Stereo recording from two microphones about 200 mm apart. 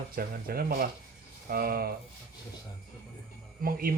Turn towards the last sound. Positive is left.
turn(degrees=-45)  # may be behind; listen again after turning